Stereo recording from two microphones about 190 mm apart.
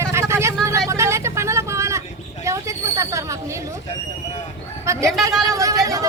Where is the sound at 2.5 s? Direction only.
15° right (ahead or behind).